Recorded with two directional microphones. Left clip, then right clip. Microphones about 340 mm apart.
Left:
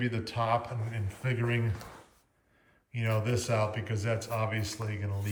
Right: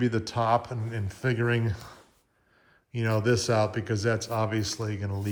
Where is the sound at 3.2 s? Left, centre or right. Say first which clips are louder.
Right 7 dB; centre.